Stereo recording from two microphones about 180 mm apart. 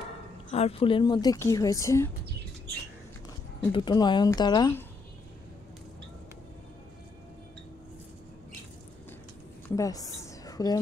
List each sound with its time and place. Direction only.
0.5 s speech: 35° left (ahead or behind); by 2.0 s 15° left (ahead or behind)
3.7 s speech: 25° left (ahead or behind)
9.8 s a woman's voice: 20° left (ahead or behind)